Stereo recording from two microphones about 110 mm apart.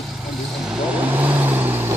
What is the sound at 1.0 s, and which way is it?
Vehicle, 15° right (ahead or behind).